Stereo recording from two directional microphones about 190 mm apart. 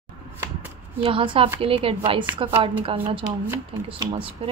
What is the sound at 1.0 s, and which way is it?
Speech, 30° right (ahead or behind).